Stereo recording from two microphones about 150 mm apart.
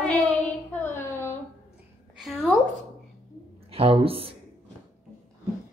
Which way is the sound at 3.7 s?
40° right (ahead or behind).